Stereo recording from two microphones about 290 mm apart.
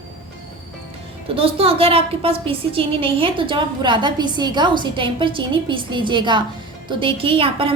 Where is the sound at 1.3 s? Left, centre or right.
Centre.